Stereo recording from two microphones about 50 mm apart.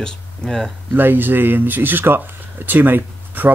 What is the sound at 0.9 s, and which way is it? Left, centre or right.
Speech, right.